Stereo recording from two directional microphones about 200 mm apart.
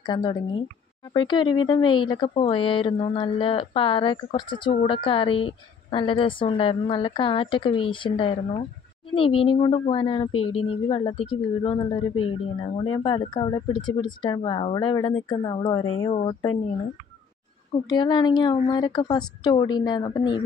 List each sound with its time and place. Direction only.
0.0 s speech: 20° left (ahead or behind)
17.8 s speech: 20° left (ahead or behind)